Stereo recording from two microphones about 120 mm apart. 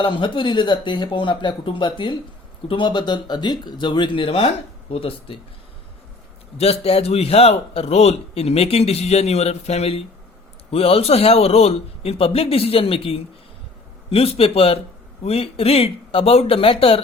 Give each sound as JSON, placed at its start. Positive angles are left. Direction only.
{"t": 0.0, "sound": "speech", "side_deg": 45}
{"t": 6.6, "sound": "a man's voice", "side_deg": 60}